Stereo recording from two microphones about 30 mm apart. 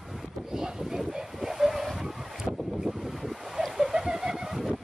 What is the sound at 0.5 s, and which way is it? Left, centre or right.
Speech, centre.